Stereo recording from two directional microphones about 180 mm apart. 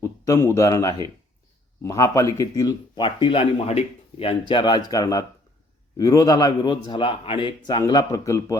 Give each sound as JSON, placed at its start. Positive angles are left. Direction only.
{"t": 0.0, "sound": "speech", "side_deg": 15}